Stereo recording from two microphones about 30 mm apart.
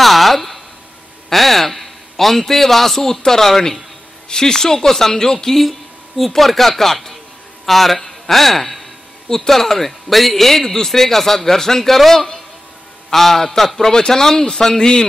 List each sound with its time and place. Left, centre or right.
0.0 s a sound: centre
1.3 s a man's voice: centre
4.3 s speech: left
5.6 s a man's voice: centre
13.8 s speech: centre